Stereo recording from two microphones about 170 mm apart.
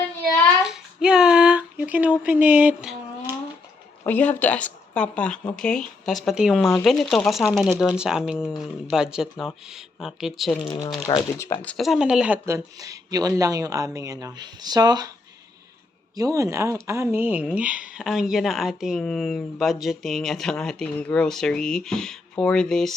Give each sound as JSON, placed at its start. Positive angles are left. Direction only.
{"t": 0.6, "sound": "child singing", "side_deg": -5}
{"t": 4.0, "sound": "speech", "side_deg": 10}
{"t": 11.0, "sound": "speech", "side_deg": 30}
{"t": 11.3, "sound": "speech", "side_deg": 15}
{"t": 16.1, "sound": "speech", "side_deg": -20}